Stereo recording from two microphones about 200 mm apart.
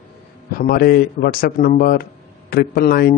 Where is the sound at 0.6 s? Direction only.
45° left (ahead or behind).